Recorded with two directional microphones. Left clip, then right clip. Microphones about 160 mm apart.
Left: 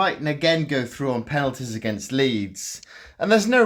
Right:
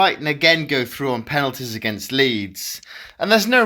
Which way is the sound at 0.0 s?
15° right (ahead or behind).